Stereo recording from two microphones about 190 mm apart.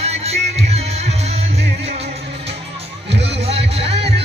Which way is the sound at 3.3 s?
30° right (ahead or behind).